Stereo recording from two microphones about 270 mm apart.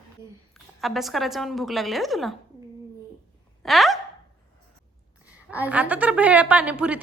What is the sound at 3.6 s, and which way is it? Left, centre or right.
Gasp, centre.